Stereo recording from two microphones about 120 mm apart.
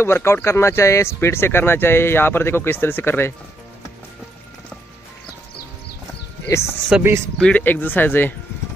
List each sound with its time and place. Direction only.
0.0 s speech: 20° left (ahead or behind)
6.5 s speech: 25° left (ahead or behind)
7.0 s speech: 20° right (ahead or behind)
7.3 s speech: 10° left (ahead or behind)